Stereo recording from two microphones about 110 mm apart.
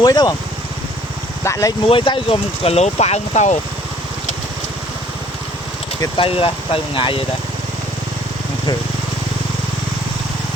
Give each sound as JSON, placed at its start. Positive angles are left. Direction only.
{"t": 0.0, "sound": "speech", "side_deg": 35}
{"t": 1.5, "sound": "speech", "side_deg": 25}
{"t": 1.9, "sound": "speech", "side_deg": 50}
{"t": 6.1, "sound": "speech", "side_deg": 55}